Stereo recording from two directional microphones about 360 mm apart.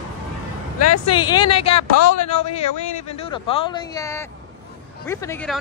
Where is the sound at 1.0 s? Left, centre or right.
Centre.